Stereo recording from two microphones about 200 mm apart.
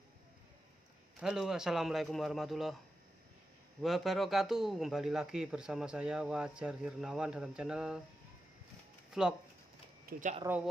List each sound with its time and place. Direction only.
1.2 s a man's voice: 5° right (ahead or behind)
3.8 s a man's voice: centre (ahead or behind)
9.2 s a man's voice: centre (ahead or behind)
10.1 s speech: 50° right (ahead or behind)
10.4 s speech: 10° right (ahead or behind)